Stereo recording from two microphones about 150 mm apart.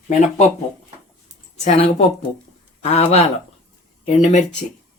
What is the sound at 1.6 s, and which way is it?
Speech, 45° left (ahead or behind).